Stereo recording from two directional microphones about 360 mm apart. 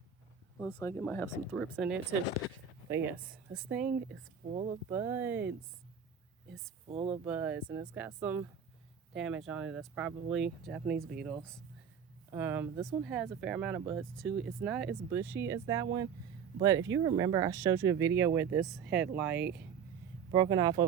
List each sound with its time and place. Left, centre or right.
0.6 s speech: centre
3.5 s speech: centre
4.5 s speech: centre
4.9 s speech: centre
6.8 s speech: centre
7.3 s speech: centre